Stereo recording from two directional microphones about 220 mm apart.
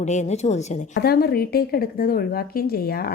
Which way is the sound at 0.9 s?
45° left (ahead or behind).